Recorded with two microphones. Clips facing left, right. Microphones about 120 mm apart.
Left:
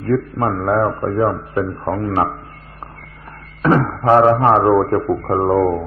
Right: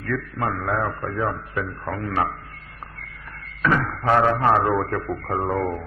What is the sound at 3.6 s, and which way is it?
A man's voice, 35° left (ahead or behind).